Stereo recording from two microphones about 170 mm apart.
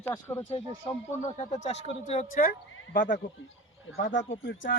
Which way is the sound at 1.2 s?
45° left (ahead or behind).